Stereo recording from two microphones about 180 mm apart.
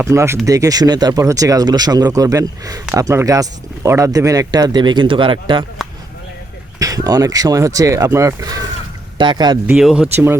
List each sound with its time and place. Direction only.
0.0 s speech: 15° right (ahead or behind)
6.7 s speech: 20° right (ahead or behind)
9.6 s speech: 5° right (ahead or behind)